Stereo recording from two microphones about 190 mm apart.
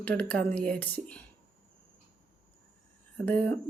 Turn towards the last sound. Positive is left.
turn(degrees=10)  # may be behind; listen again after turning